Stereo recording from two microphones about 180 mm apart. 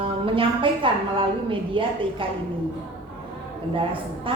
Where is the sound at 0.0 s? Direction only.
30° right (ahead or behind).